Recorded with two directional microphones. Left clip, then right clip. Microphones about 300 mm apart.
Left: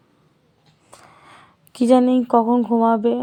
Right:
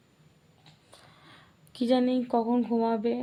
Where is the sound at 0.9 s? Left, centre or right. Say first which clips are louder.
Left 10 dB; left.